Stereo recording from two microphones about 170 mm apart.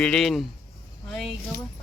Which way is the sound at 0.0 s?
5° left (ahead or behind).